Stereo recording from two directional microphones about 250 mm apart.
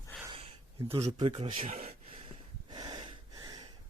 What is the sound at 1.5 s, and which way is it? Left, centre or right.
Gasp, right.